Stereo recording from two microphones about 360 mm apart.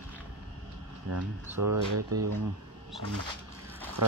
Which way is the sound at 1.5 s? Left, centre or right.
Right.